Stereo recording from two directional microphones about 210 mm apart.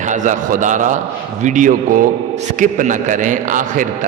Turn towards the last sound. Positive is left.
turn(degrees=-40)  # may be behind; listen again after turning